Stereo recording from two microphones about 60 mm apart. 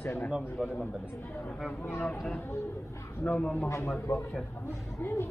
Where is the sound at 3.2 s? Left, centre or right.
Centre.